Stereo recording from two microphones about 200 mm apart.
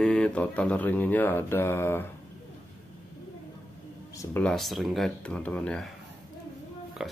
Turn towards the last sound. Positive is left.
turn(degrees=0)  # may be behind; listen again after turning